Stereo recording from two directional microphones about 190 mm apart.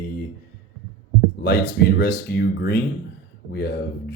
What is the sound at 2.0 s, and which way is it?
Speech, 60° left (ahead or behind).